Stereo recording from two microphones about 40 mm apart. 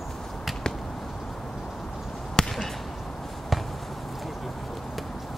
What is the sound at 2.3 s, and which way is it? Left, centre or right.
Basketball bounce, centre.